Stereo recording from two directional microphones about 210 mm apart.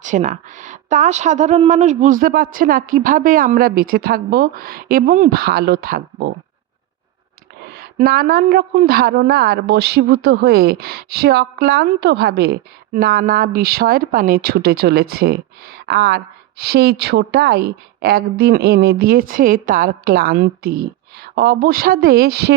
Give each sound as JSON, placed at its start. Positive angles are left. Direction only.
{"t": 0.0, "sound": "a woman's voice", "side_deg": -35}
{"t": 7.7, "sound": "a woman's voice", "side_deg": -45}